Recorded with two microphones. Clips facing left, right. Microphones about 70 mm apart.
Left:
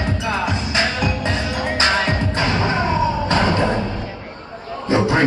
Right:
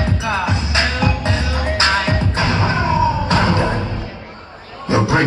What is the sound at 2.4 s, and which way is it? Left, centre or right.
Music, centre.